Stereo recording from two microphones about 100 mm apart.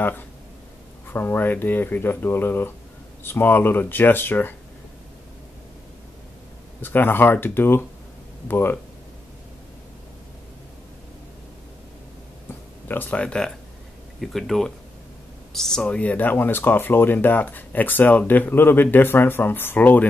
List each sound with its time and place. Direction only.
1.0 s speech: 20° left (ahead or behind)
6.8 s speech: 20° left (ahead or behind)
12.8 s speech: 20° left (ahead or behind)